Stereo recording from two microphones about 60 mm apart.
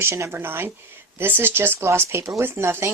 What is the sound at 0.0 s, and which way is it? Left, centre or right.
Speech, right.